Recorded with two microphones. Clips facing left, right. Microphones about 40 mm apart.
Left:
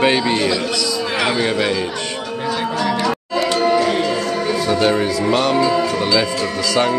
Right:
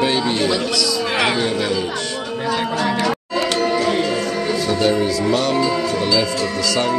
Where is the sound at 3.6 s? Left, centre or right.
Centre.